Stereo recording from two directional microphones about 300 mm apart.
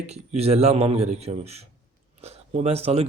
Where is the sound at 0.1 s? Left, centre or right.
Right.